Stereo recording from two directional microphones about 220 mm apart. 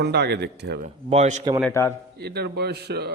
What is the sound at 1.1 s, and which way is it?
Speech, 30° right (ahead or behind).